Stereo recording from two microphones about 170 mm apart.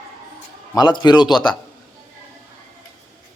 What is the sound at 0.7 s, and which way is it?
Speech, 25° left (ahead or behind).